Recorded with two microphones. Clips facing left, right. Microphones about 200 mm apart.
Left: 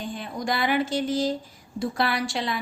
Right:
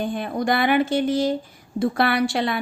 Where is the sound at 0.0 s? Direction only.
60° right (ahead or behind).